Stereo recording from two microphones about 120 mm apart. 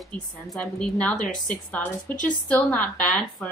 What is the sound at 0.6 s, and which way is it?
A woman's voice, 10° left (ahead or behind).